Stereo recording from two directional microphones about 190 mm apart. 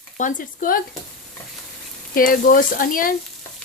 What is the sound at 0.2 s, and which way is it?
Sizzle, 45° left (ahead or behind).